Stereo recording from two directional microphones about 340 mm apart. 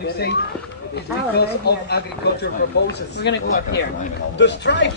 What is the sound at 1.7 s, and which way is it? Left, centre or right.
Speech, left.